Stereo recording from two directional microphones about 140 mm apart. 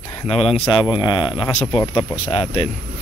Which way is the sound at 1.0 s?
35° left (ahead or behind).